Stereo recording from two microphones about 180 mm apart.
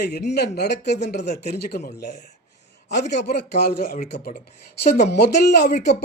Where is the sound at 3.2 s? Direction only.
60° left (ahead or behind).